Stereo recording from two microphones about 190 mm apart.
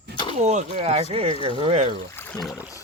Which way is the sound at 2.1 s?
10° left (ahead or behind).